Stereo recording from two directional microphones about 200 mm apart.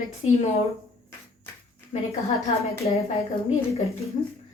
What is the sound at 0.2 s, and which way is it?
Speech, 30° left (ahead or behind).